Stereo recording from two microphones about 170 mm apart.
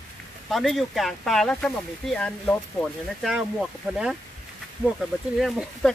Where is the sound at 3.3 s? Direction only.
5° right (ahead or behind).